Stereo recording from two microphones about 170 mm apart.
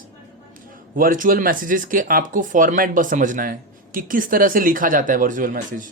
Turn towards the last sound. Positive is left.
turn(degrees=-50)  # may be behind; listen again after turning